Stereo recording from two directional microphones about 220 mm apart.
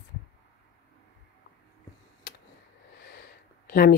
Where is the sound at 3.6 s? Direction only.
45° left (ahead or behind).